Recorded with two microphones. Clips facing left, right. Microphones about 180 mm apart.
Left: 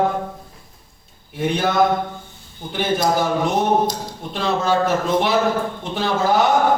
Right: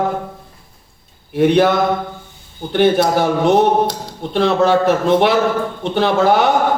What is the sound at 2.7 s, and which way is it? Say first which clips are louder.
A man's voice: right 6 dB; 65° right (ahead or behind).